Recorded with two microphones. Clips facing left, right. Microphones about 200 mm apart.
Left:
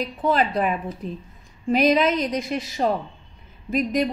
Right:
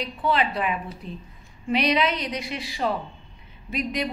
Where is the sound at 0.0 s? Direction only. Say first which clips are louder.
Left 3 dB; 45° left (ahead or behind).